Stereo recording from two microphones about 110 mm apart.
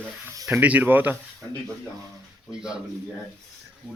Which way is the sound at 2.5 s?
5° right (ahead or behind).